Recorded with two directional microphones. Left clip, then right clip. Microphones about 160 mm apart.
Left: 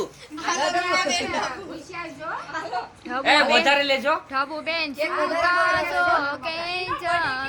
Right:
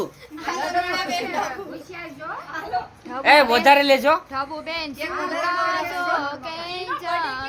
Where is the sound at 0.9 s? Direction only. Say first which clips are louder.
Left 1 dB; 40° right (ahead or behind).